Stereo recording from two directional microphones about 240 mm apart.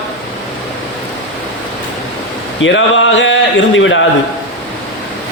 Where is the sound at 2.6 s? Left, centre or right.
Left.